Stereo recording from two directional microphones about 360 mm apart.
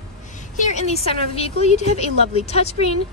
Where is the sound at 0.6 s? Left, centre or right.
Centre.